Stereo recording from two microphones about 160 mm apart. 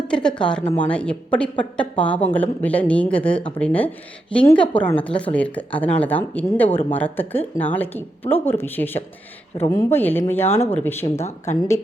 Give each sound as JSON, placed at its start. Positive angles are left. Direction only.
{"t": 0.1, "sound": "speech", "side_deg": 5}
{"t": 10.4, "sound": "speech", "side_deg": 40}
{"t": 10.7, "sound": "speech", "side_deg": 15}